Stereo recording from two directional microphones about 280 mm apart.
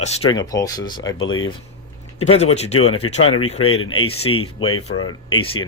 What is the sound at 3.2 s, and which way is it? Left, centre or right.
Speech, left.